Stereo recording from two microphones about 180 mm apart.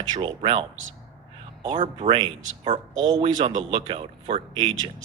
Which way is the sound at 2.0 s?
25° right (ahead or behind).